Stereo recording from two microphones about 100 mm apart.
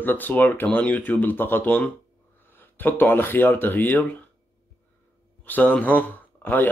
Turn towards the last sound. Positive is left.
turn(degrees=20)  # may be behind; listen again after turning